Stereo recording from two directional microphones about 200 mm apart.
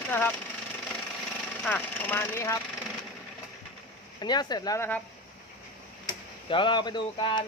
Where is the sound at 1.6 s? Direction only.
10° left (ahead or behind).